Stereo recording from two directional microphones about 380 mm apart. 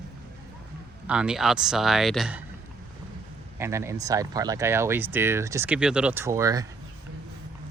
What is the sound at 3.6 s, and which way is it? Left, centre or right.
Speech, centre.